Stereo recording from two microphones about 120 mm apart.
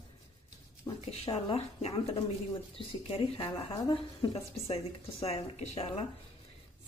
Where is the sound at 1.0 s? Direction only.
55° left (ahead or behind).